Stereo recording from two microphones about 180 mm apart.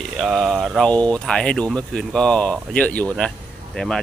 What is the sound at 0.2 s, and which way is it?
Speech, centre (ahead or behind).